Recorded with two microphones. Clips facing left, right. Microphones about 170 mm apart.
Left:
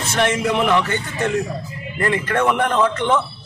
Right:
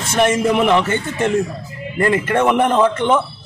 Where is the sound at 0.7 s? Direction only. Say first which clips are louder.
Right 3 dB; 25° right (ahead or behind).